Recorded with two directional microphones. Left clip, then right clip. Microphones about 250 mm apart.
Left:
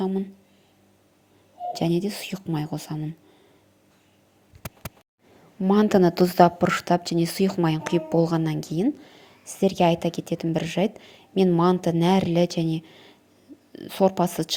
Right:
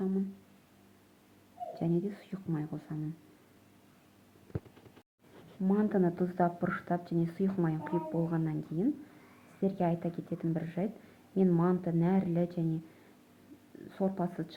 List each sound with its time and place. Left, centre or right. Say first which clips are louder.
1.7 s speech: left 9 dB; left
5.6 s speech: left 12 dB; left
13.8 s speech: left 14 dB; left